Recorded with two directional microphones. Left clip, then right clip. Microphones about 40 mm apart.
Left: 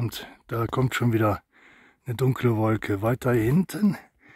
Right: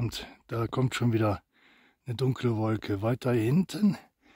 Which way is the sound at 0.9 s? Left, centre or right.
Centre.